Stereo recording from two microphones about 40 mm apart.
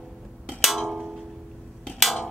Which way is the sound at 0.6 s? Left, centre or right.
Centre.